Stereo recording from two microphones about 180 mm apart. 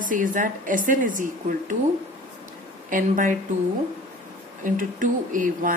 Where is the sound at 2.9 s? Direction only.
50° right (ahead or behind).